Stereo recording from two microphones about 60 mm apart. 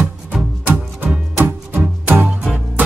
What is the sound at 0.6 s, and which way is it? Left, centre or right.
Music, right.